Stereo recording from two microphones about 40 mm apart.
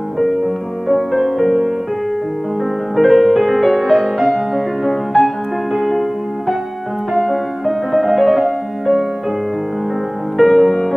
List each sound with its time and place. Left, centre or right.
0.2 s music: centre
3.0 s music: centre
10.3 s music: centre